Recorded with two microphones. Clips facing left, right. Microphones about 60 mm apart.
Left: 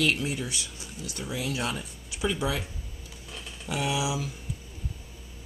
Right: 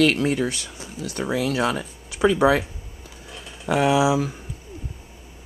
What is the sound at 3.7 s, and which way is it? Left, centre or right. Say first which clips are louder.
Speech: right 11 dB; right.